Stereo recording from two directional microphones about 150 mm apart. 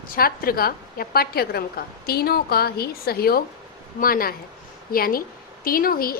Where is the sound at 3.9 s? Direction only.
70° left (ahead or behind).